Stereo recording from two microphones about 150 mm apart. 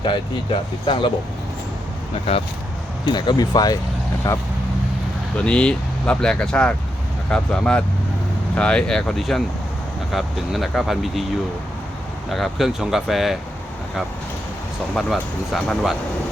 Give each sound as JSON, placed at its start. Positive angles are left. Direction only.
{"t": 0.0, "sound": "speech", "side_deg": 30}
{"t": 2.3, "sound": "speech", "side_deg": 40}
{"t": 3.1, "sound": "speech", "side_deg": 30}
{"t": 5.4, "sound": "speech", "side_deg": 5}
{"t": 12.3, "sound": "speech", "side_deg": 0}
{"t": 14.9, "sound": "speech", "side_deg": 0}